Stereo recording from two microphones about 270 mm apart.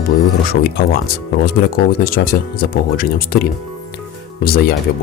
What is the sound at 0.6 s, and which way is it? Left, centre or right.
Speech, left.